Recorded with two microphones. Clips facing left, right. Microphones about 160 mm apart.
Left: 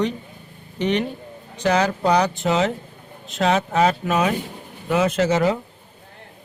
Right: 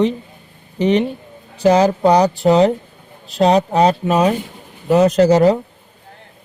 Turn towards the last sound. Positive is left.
turn(degrees=-35)  # may be behind; listen again after turning